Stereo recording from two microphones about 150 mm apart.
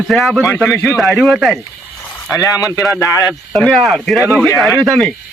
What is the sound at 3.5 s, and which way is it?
Speech, centre (ahead or behind).